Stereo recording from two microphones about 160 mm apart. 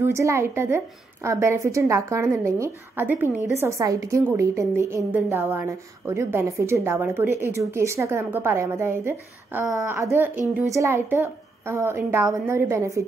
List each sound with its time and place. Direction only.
0.0 s a woman's voice: 15° right (ahead or behind)